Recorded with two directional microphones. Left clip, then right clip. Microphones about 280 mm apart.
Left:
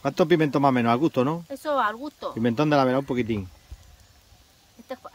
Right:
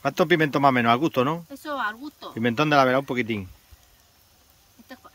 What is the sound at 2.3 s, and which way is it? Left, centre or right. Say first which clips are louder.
Speech: right 2 dB; centre.